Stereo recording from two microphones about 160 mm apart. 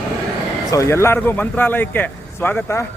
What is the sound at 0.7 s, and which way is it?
Speech, 20° left (ahead or behind).